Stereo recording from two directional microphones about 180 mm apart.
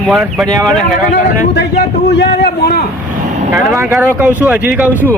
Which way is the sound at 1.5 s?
65° left (ahead or behind).